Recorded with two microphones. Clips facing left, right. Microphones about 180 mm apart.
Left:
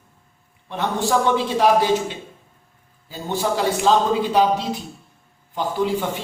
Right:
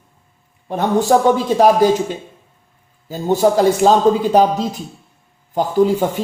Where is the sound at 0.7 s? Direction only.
45° right (ahead or behind).